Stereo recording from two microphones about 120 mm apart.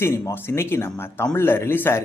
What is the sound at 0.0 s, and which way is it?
A man's voice, 20° left (ahead or behind).